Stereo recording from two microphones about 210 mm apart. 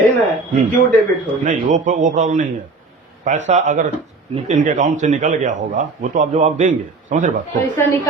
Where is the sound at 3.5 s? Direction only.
35° right (ahead or behind).